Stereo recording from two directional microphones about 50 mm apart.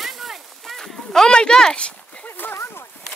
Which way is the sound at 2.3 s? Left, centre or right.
Left.